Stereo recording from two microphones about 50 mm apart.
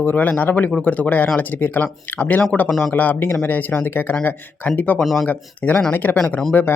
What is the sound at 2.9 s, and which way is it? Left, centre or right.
Speech, left.